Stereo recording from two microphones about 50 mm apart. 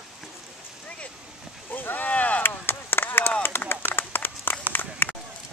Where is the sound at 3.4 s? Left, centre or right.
Left.